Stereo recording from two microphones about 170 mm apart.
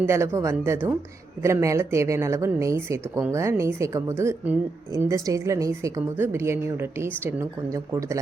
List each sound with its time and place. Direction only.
0.0 s speech: 15° right (ahead or behind)